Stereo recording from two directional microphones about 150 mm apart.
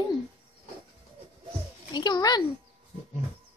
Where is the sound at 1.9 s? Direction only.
30° left (ahead or behind).